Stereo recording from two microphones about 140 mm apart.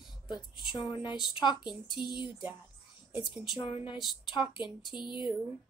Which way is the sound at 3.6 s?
40° left (ahead or behind).